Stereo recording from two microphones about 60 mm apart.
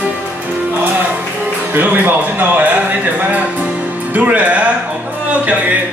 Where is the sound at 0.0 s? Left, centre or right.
Right.